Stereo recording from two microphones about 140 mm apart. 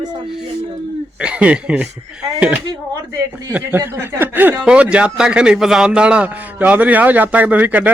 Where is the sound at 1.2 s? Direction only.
10° right (ahead or behind).